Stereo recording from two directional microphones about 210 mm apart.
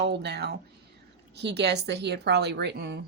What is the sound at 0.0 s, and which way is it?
A woman's voice, 55° right (ahead or behind).